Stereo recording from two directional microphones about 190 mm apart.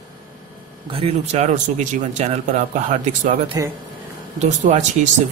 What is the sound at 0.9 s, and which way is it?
Speech, 35° right (ahead or behind).